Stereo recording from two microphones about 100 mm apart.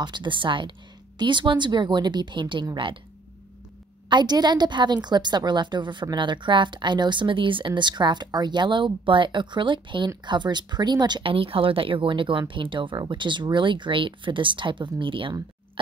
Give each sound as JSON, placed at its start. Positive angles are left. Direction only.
{"t": 0.0, "sound": "a woman's voice", "side_deg": -50}
{"t": 4.1, "sound": "a woman's voice", "side_deg": -45}
{"t": 11.3, "sound": "speech", "side_deg": -65}